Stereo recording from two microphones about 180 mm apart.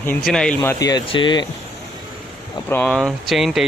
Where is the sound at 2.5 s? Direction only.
10° left (ahead or behind).